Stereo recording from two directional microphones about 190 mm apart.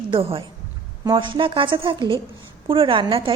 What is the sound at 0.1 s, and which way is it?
A woman's voice, 30° right (ahead or behind).